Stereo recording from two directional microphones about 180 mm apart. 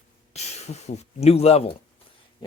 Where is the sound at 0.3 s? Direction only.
35° left (ahead or behind).